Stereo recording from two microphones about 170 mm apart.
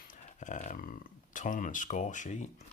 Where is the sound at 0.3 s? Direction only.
45° left (ahead or behind).